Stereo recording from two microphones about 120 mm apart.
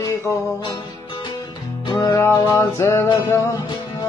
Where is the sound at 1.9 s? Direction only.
40° left (ahead or behind).